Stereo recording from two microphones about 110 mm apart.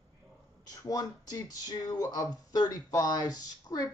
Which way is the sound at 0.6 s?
35° left (ahead or behind).